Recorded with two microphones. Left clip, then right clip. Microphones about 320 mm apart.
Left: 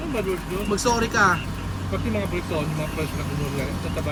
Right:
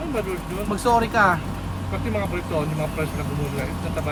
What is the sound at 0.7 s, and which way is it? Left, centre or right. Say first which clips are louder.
Speech: right 3 dB; centre.